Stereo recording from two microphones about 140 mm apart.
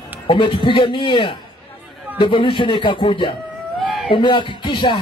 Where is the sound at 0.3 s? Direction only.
40° left (ahead or behind).